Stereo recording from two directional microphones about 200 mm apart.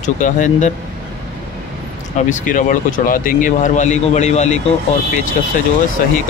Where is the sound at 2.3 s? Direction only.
40° left (ahead or behind).